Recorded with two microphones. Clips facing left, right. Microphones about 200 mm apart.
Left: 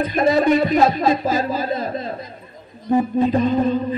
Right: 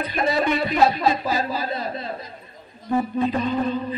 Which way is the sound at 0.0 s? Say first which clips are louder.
Left 6 dB; 45° left (ahead or behind).